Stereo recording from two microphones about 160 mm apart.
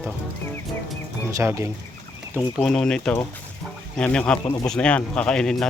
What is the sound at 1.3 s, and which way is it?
Speech, 20° right (ahead or behind).